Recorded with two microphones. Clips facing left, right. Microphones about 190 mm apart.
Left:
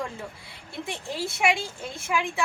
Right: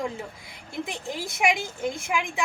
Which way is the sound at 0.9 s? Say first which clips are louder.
Left 1 dB; 15° right (ahead or behind).